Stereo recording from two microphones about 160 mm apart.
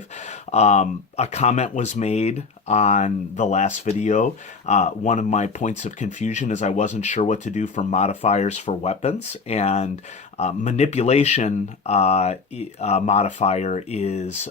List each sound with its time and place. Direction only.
0.3 s speech: 45° left (ahead or behind)